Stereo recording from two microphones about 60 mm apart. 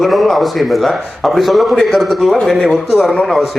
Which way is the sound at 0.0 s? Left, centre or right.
Centre.